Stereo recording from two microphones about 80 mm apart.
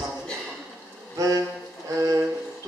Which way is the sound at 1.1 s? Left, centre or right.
Right.